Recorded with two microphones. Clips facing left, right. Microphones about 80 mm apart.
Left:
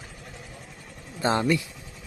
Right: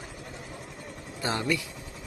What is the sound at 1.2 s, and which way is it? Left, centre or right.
Vehicle, left.